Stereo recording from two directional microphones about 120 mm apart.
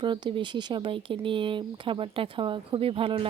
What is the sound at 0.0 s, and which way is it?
Speech, 45° right (ahead or behind).